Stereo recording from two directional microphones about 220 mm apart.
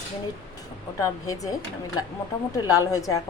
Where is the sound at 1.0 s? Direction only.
15° left (ahead or behind).